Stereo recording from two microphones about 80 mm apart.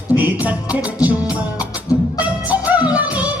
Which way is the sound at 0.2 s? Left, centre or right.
Centre.